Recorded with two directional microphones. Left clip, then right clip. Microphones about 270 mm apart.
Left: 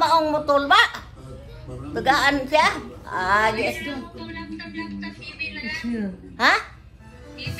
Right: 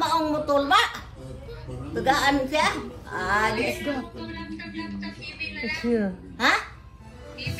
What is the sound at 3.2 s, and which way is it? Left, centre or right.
Music, centre.